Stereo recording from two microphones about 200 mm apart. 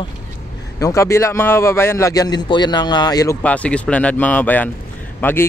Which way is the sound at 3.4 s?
5° left (ahead or behind).